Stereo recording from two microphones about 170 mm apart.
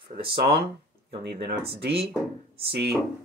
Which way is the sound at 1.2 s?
85° right.